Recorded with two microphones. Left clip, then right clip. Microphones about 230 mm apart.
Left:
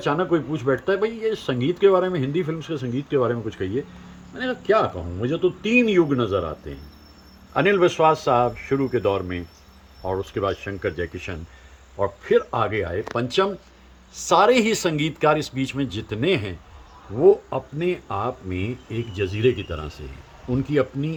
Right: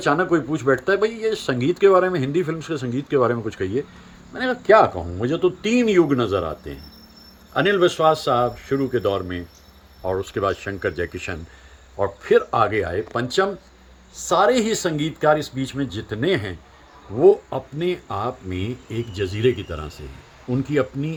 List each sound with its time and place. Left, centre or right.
0.0 s speech: centre
7.6 s speech: centre